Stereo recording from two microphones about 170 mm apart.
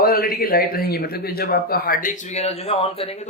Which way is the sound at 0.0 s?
60° left (ahead or behind).